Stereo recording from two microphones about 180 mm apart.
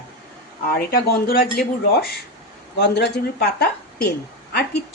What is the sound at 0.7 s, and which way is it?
Speech, 60° left (ahead or behind).